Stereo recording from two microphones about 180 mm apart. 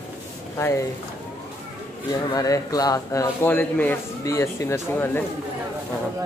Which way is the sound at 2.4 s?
20° left (ahead or behind).